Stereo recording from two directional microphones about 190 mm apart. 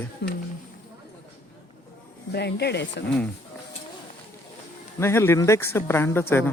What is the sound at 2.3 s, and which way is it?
Speech, 60° left (ahead or behind).